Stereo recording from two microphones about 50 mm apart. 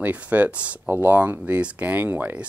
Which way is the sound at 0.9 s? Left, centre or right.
Right.